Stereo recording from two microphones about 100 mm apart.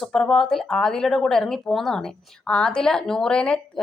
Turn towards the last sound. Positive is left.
turn(degrees=10)  # may be behind; listen again after turning